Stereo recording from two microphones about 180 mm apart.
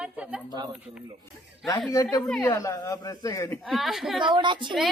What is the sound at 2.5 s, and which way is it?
A man's voice, 20° left (ahead or behind).